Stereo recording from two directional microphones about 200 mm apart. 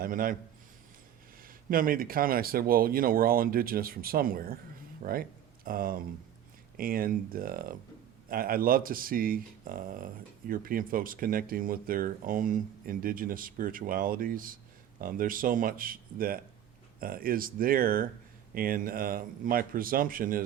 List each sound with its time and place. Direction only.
0.0 s a man's voice: 45° right (ahead or behind)
1.4 s speech: 45° right (ahead or behind)